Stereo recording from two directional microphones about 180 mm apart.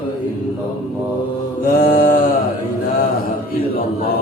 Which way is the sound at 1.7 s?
50° left (ahead or behind).